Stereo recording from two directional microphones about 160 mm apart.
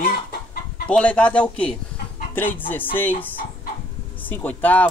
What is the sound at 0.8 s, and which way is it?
Speech, 10° left (ahead or behind).